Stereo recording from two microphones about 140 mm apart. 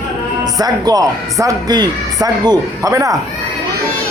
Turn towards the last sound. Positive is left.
turn(degrees=-25)  # may be behind; listen again after turning